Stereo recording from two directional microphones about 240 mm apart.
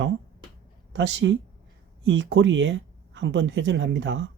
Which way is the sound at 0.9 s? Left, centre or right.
Right.